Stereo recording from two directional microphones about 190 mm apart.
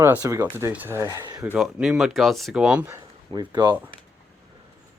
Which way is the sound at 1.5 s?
5° right (ahead or behind).